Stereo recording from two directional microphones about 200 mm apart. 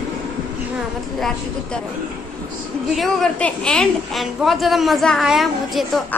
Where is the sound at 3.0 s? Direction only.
5° left (ahead or behind).